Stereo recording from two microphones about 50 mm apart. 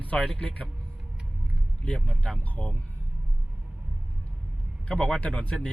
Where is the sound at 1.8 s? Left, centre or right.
Left.